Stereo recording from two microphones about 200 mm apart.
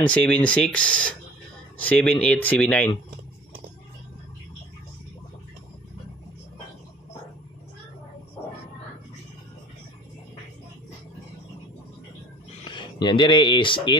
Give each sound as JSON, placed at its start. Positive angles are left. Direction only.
{"t": 0.1, "sound": "speech", "side_deg": 5}
{"t": 12.6, "sound": "speech", "side_deg": 25}